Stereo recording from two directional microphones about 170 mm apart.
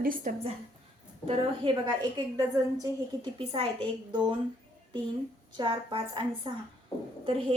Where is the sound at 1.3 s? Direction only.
30° right (ahead or behind).